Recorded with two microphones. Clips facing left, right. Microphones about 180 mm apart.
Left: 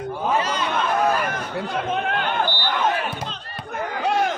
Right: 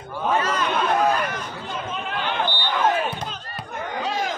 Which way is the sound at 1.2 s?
55° left (ahead or behind).